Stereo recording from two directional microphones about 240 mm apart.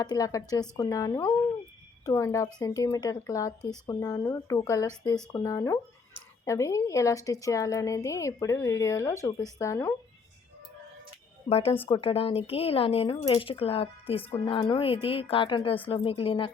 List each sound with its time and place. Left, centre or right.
0.0 s a woman's voice: centre
11.4 s speech: left